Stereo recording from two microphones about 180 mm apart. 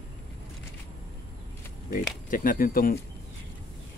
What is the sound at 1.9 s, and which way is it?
Speech, 50° left (ahead or behind).